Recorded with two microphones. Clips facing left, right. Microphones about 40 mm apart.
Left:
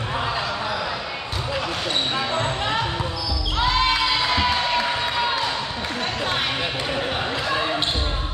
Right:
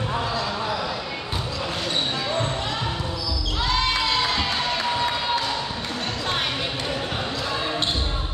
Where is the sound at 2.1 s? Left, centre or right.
Left.